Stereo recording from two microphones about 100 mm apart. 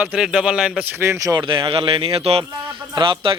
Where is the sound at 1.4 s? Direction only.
55° right (ahead or behind); by 2.4 s 80° right.